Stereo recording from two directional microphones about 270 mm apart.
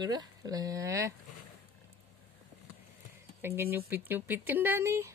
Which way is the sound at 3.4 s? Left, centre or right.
Centre.